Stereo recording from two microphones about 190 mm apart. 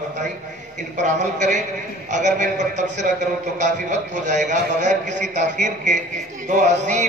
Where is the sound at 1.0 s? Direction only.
40° right (ahead or behind).